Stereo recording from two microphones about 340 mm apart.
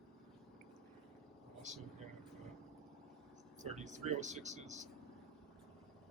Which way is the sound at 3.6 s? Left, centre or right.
Right.